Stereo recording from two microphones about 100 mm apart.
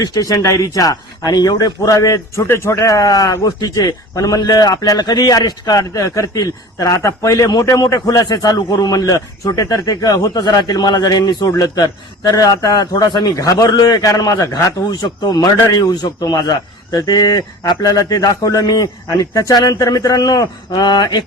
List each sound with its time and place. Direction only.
0.0 s speech: 40° left (ahead or behind)
15.0 s a man's voice: 45° left (ahead or behind)